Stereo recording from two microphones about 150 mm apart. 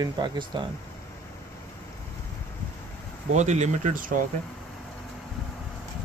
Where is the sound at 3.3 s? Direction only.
50° right (ahead or behind).